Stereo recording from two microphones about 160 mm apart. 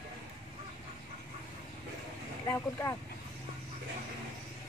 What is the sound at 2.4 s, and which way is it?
Speech, 20° left (ahead or behind).